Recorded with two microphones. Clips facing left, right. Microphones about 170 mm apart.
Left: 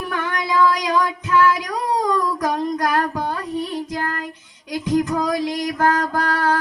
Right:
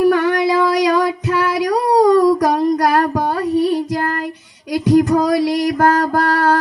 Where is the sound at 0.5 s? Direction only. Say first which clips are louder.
Right 4 dB; 35° right (ahead or behind).